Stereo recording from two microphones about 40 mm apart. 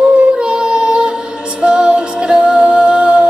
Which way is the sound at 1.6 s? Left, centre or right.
Right.